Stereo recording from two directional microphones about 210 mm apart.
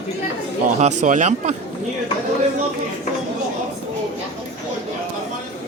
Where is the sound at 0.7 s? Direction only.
35° right (ahead or behind).